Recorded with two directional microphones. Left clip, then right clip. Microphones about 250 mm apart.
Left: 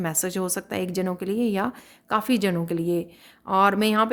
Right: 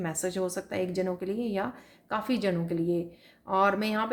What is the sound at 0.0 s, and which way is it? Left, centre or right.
A woman's voice, left.